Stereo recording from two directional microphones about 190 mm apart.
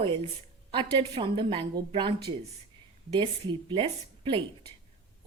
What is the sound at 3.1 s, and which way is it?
Speech, 25° right (ahead or behind).